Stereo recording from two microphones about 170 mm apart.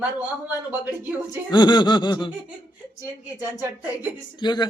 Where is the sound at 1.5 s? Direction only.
25° left (ahead or behind).